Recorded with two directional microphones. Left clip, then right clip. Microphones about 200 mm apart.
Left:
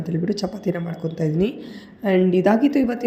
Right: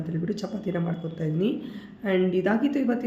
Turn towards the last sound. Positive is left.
turn(degrees=30)  # may be behind; listen again after turning